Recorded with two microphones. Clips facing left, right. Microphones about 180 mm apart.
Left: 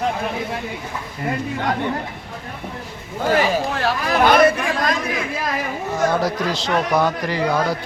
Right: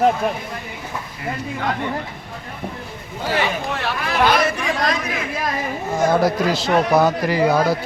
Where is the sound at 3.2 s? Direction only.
40° left (ahead or behind).